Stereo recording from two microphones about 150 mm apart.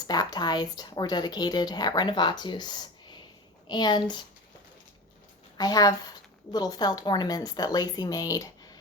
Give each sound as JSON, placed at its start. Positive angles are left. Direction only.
{"t": 0.1, "sound": "speech", "side_deg": 25}
{"t": 5.5, "sound": "speech", "side_deg": 25}